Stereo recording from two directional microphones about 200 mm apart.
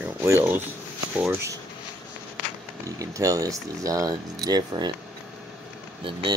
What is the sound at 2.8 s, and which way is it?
Speech, 15° right (ahead or behind).